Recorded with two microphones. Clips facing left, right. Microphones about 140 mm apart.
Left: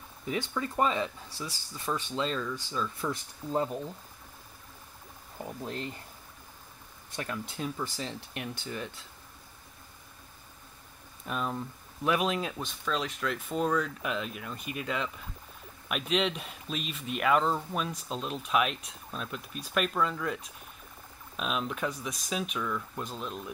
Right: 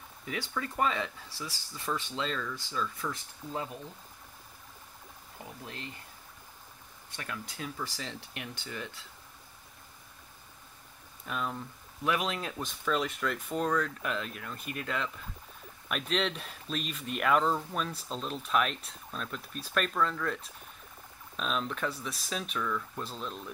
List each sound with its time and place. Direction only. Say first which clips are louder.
0.2 s speech: left 4 dB; 25° left (ahead or behind)
3.0 s speech: left 4 dB; 35° left (ahead or behind)
5.6 s speech: left 8 dB; 35° left (ahead or behind)
7.2 s speech: left 5 dB; 30° left (ahead or behind)
11.2 s speech: left 2 dB; 15° left (ahead or behind)
12.5 s speech: right 1 dB; 5° right (ahead or behind)
21.4 s speech: left 1 dB; 5° left (ahead or behind)